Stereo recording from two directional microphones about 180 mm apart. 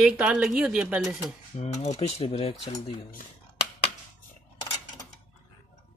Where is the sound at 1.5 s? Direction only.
35° left (ahead or behind).